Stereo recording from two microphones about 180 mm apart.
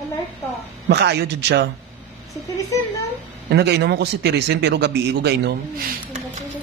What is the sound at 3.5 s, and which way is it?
A man's voice, 70° right (ahead or behind).